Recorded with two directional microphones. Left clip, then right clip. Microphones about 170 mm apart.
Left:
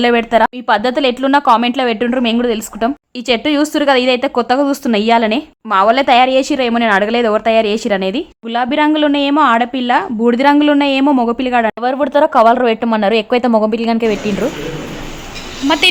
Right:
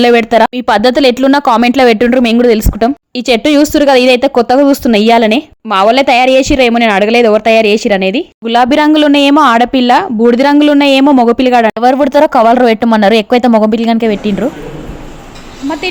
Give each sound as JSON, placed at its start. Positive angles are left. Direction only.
{"t": 0.0, "sound": "speech", "side_deg": -30}